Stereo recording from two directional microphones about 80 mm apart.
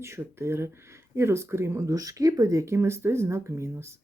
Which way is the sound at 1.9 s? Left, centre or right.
Right.